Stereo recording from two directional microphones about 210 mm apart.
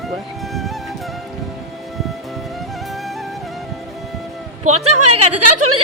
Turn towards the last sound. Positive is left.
turn(degrees=-90)